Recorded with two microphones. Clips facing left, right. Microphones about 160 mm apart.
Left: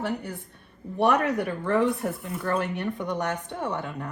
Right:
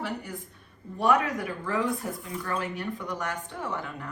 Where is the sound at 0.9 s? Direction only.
65° left (ahead or behind).